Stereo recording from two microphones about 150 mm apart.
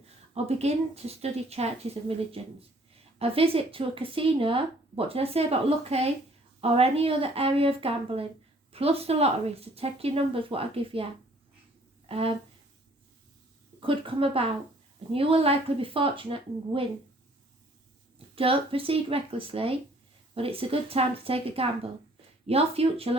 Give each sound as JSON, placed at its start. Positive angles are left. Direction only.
{"t": 0.3, "sound": "speech", "side_deg": -45}
{"t": 13.8, "sound": "speech", "side_deg": -35}
{"t": 18.3, "sound": "speech", "side_deg": -35}